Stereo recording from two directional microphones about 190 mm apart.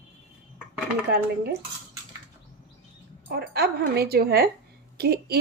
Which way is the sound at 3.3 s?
55° right (ahead or behind).